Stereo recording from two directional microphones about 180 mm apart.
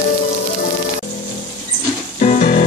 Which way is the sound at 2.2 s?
45° left (ahead or behind).